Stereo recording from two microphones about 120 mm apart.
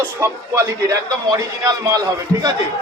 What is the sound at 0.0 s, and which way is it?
A man's voice, 25° right (ahead or behind).